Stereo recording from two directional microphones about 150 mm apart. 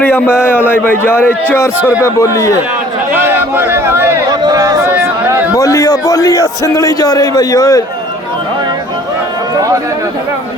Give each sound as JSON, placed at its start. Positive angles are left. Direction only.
{"t": 0.0, "sound": "a man's voice", "side_deg": 15}
{"t": 3.1, "sound": "a sound", "side_deg": -15}
{"t": 5.5, "sound": "a man's voice", "side_deg": 20}